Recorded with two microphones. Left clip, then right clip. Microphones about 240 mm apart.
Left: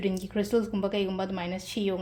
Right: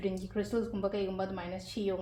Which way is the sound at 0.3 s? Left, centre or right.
Left.